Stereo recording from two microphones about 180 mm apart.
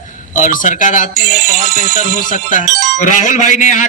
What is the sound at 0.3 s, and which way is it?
Speech, 50° left (ahead or behind).